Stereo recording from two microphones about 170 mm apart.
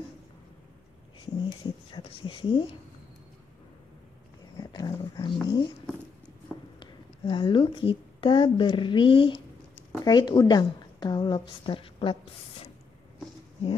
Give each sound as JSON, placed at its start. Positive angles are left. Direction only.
{"t": 1.2, "sound": "speech", "side_deg": 25}
{"t": 4.6, "sound": "a sound", "side_deg": 25}
{"t": 6.8, "sound": "a woman's voice", "side_deg": 30}